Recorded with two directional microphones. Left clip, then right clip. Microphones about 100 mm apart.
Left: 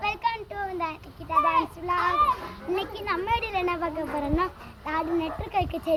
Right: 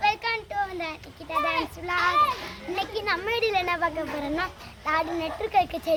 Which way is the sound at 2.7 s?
45° right (ahead or behind).